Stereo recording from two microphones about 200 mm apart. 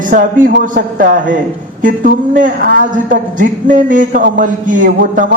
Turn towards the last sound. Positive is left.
turn(degrees=-40)  # may be behind; listen again after turning